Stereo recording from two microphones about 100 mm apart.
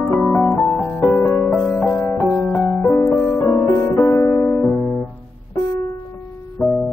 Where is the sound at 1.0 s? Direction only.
15° left (ahead or behind).